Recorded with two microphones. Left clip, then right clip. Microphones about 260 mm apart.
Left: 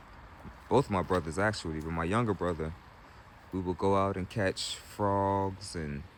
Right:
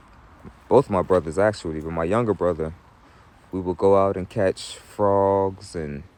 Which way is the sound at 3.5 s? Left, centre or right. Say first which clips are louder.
Right 11 dB; right.